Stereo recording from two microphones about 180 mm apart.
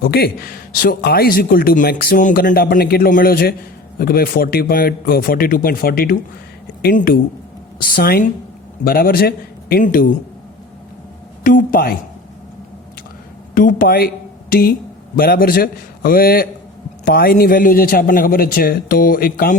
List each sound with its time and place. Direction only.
0.0 s a man's voice: 55° left (ahead or behind)
11.4 s speech: 50° left (ahead or behind)
13.5 s a man's voice: 50° left (ahead or behind)